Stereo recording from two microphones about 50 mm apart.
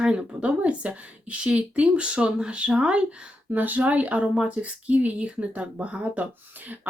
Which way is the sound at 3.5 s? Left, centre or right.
Right.